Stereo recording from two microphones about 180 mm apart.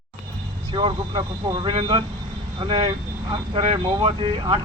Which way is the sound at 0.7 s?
25° right (ahead or behind).